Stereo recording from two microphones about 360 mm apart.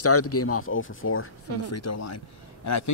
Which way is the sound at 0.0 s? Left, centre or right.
Left.